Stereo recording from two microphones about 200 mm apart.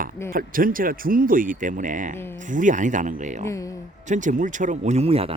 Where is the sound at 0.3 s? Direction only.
45° right (ahead or behind).